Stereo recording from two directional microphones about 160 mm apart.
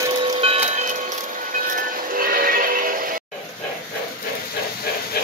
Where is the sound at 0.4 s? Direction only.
40° right (ahead or behind).